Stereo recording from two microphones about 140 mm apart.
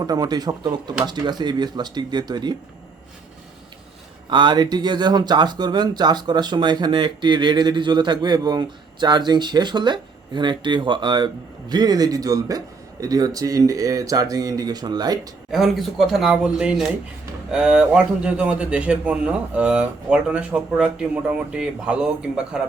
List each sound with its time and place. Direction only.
0.0 s a man's voice: 30° right (ahead or behind)
4.3 s a man's voice: 35° right (ahead or behind)
15.5 s a man's voice: centre (ahead or behind)